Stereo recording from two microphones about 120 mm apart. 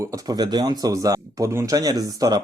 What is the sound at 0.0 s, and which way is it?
Speech, 30° right (ahead or behind).